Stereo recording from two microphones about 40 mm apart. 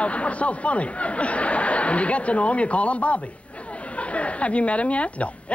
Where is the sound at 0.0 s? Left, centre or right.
Left.